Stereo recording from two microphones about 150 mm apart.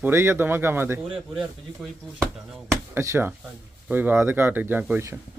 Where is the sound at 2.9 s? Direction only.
15° right (ahead or behind).